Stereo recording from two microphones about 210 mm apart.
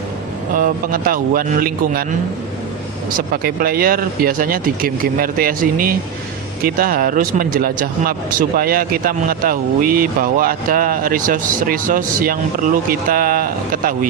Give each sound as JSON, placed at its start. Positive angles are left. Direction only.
{"t": 0.5, "sound": "speech", "side_deg": -40}
{"t": 3.2, "sound": "speech", "side_deg": -45}